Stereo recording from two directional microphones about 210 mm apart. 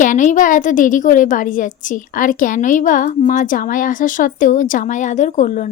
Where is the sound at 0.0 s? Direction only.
35° left (ahead or behind).